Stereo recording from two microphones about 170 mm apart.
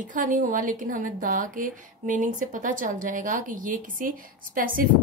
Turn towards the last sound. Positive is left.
turn(degrees=-55)  # may be behind; listen again after turning